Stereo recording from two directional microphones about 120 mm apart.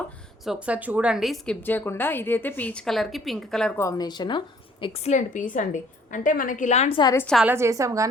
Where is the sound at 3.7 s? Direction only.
25° left (ahead or behind); by 5.4 s 70° left (ahead or behind).